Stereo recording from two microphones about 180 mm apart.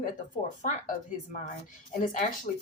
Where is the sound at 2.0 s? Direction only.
50° left (ahead or behind).